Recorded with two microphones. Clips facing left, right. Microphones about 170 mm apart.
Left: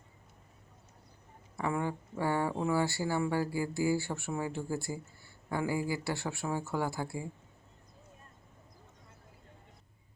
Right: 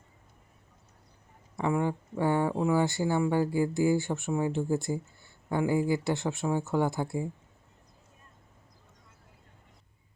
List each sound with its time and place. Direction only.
1.5 s speech: 20° right (ahead or behind)